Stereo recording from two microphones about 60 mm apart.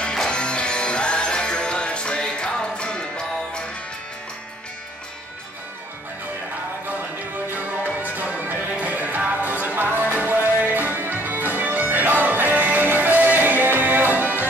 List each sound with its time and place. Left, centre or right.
0.0 s music: centre
6.9 s music: right